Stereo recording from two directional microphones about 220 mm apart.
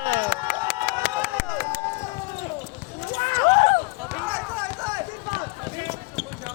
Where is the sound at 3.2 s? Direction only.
20° left (ahead or behind).